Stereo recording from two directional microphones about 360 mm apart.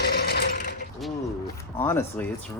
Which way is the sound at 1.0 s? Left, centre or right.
Centre.